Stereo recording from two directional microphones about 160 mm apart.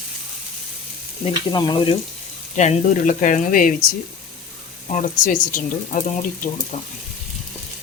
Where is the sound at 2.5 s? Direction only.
45° left (ahead or behind).